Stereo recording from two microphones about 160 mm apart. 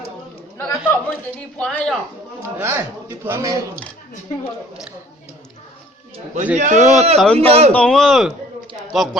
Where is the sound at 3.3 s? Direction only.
20° right (ahead or behind).